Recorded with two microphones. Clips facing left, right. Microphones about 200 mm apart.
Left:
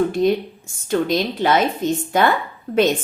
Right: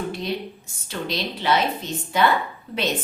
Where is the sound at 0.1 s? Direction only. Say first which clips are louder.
Left 10 dB; 45° left (ahead or behind).